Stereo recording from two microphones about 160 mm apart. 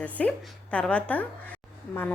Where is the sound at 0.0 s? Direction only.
10° left (ahead or behind).